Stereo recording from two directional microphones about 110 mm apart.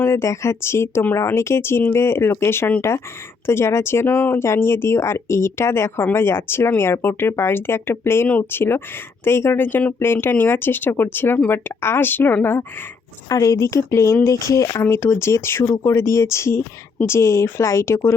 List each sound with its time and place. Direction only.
0.0 s speech: 25° left (ahead or behind)
13.2 s speech: 30° left (ahead or behind)